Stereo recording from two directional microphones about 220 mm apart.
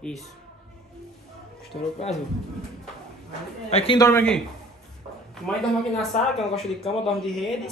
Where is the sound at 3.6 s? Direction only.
25° left (ahead or behind).